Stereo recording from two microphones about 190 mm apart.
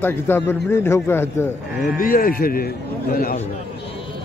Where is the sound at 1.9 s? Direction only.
50° left (ahead or behind).